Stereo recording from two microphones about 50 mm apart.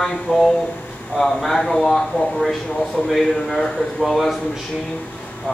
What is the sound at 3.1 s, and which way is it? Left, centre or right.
A man's voice, centre.